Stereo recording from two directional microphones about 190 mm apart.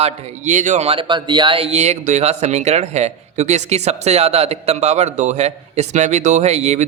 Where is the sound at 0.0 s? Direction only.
40° right (ahead or behind).